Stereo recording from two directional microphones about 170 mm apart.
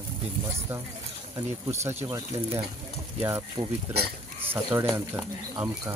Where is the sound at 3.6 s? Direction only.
25° right (ahead or behind).